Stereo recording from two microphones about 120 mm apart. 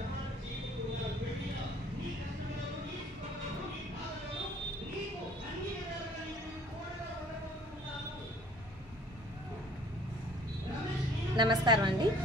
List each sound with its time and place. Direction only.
11.3 s a woman's voice: 40° right (ahead or behind)